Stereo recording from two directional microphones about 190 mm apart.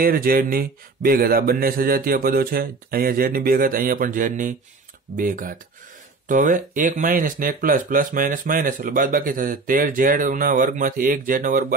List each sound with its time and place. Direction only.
0.0 s speech: 50° right (ahead or behind)